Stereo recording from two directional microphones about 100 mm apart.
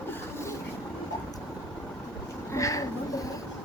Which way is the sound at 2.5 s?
30° left (ahead or behind).